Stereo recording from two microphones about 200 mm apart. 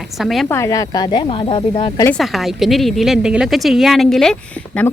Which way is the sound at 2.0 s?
Centre (ahead or behind).